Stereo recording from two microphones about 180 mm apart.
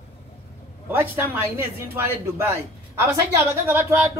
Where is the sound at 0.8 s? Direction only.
10° right (ahead or behind).